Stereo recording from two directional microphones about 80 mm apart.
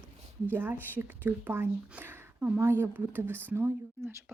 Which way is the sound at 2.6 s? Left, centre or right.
Right.